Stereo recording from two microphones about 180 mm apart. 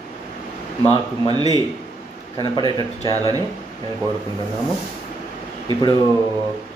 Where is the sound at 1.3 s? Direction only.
20° right (ahead or behind).